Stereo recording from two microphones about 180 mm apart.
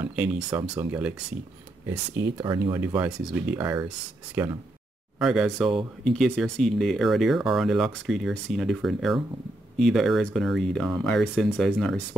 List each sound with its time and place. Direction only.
0.0 s speech: 10° right (ahead or behind)